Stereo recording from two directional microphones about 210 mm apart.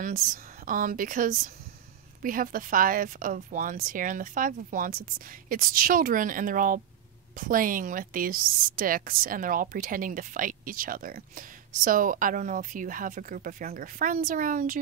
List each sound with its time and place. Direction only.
0.0 s a woman's voice: 40° right (ahead or behind)